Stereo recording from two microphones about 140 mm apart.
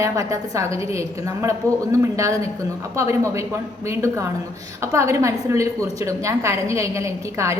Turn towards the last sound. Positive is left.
turn(degrees=-20)  # may be behind; listen again after turning